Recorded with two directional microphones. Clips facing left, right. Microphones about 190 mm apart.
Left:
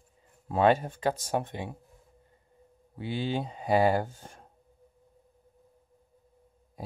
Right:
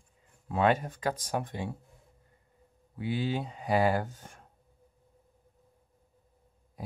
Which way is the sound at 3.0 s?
25° left (ahead or behind).